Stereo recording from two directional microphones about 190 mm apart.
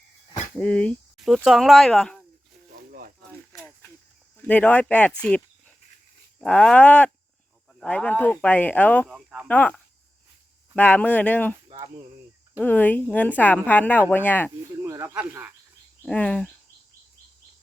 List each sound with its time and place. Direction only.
0.5 s speech: 5° left (ahead or behind)
4.4 s speech: 10° left (ahead or behind)
9.0 s speech: 5° right (ahead or behind)
9.5 s speech: 5° left (ahead or behind)
11.7 s speech: 20° right (ahead or behind)
12.5 s speech: 10° left (ahead or behind)
14.8 s speech: 15° right (ahead or behind)
16.0 s speech: 5° left (ahead or behind)